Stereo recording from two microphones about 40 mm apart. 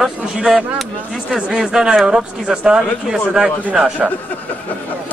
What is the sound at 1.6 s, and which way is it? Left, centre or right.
A man's voice, centre.